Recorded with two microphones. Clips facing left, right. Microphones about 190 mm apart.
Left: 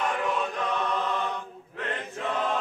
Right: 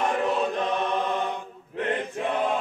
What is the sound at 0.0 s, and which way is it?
Chant, 30° right (ahead or behind).